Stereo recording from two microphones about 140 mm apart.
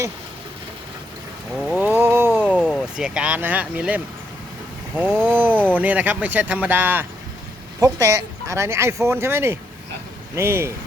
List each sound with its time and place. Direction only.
1.5 s a sound: 5° right (ahead or behind)
2.9 s speech: 5° right (ahead or behind)
5.2 s speech: 15° right (ahead or behind)